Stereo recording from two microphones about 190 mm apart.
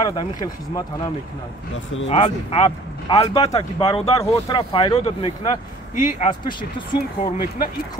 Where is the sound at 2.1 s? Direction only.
30° left (ahead or behind).